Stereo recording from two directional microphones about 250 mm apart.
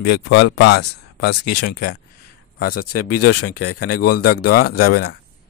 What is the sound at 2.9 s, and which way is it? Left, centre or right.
Speech, left.